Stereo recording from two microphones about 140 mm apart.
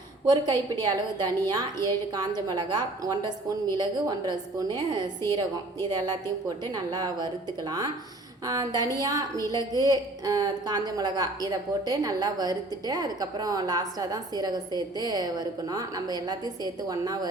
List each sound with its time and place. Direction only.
0.3 s a woman's voice: 30° right (ahead or behind)
8.4 s a woman's voice: 25° right (ahead or behind)